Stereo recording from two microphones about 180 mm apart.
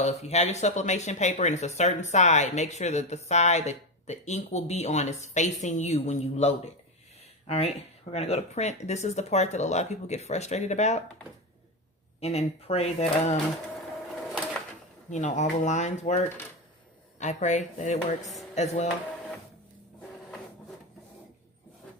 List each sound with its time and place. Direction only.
0.0 s speech: 35° left (ahead or behind)
12.2 s speech: 35° left (ahead or behind)
15.1 s speech: 40° left (ahead or behind)